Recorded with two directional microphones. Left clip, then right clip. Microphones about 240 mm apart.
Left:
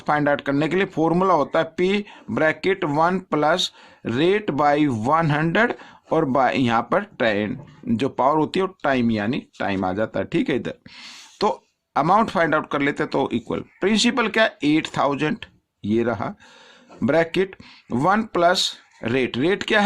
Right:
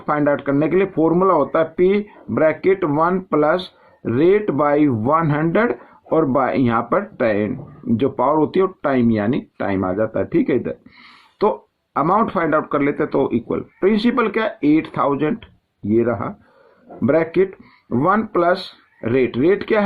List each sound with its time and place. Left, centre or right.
0.0 s speech: left